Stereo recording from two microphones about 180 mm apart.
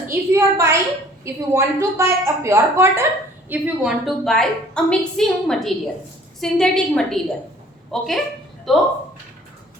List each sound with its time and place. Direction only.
0.1 s a woman's voice: 15° right (ahead or behind)
3.5 s a woman's voice: 5° right (ahead or behind)